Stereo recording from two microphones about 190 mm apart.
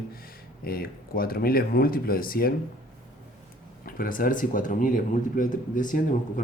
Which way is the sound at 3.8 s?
50° left (ahead or behind).